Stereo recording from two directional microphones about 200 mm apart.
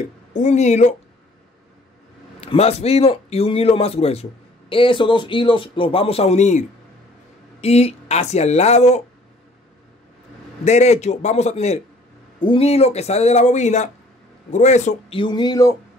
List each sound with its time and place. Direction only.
0.3 s speech: 35° left (ahead or behind)
2.4 s a man's voice: 30° left (ahead or behind)
7.6 s speech: 30° left (ahead or behind)
10.6 s a man's voice: 35° left (ahead or behind); by 15.7 s 20° left (ahead or behind)